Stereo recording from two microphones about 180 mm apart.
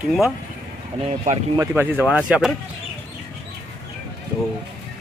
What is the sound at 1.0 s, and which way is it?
Speech, 35° right (ahead or behind).